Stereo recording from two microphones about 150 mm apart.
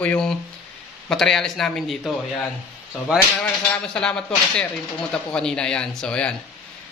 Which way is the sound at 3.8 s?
5° left (ahead or behind).